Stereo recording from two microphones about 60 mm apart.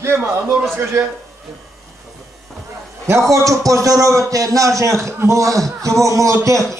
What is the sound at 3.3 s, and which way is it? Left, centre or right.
A man's voice, right.